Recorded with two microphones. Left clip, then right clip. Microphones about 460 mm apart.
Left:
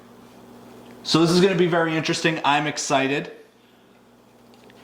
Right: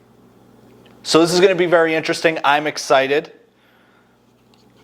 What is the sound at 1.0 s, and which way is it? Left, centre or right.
Speech, right.